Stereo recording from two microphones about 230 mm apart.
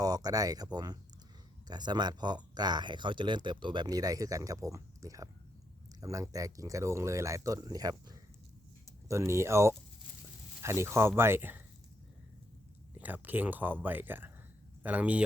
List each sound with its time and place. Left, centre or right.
0.0 s speech: centre
12.9 s speech: centre